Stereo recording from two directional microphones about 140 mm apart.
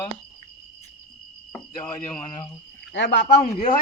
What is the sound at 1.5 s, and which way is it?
Speech, 10° left (ahead or behind).